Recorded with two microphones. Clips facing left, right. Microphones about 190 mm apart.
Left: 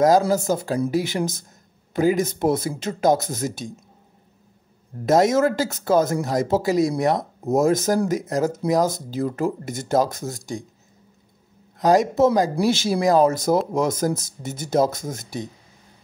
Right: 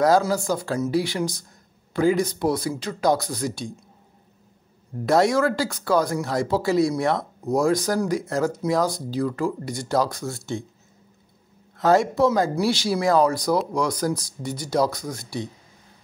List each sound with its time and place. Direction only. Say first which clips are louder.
0.3 s speech: left 3 dB; 20° left (ahead or behind)
5.0 s speech: left 2 dB; 20° left (ahead or behind)
11.8 s a man's voice: left 2 dB; 15° left (ahead or behind)